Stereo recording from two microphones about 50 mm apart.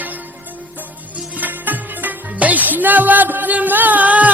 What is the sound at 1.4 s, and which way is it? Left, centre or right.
Music, right.